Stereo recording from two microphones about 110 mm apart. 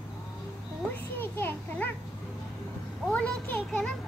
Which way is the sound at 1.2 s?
20° left (ahead or behind).